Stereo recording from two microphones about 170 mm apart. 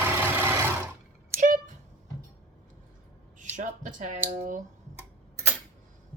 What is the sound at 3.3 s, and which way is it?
A woman's voice, 45° right (ahead or behind).